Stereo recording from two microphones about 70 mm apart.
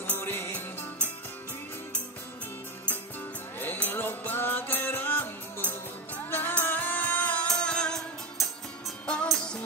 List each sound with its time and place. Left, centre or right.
0.2 s music: left
0.5 s music: left
3.5 s music: left; by 8.0 s centre
9.0 s music: centre